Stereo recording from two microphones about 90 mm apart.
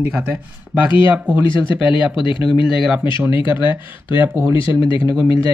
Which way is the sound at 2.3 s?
65° left (ahead or behind).